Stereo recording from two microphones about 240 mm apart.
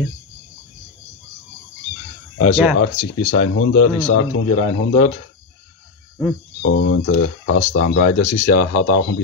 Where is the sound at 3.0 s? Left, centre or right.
Left.